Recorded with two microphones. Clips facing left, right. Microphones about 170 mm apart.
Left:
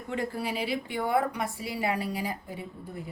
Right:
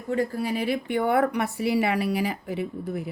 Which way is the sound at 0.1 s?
45° right (ahead or behind).